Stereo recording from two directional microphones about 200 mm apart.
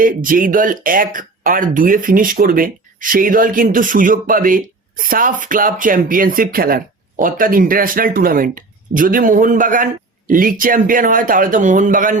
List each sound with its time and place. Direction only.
0.0 s speech: 45° right (ahead or behind)